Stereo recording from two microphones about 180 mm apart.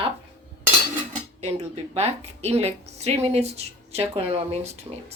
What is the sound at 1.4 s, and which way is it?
A woman's voice, 35° right (ahead or behind).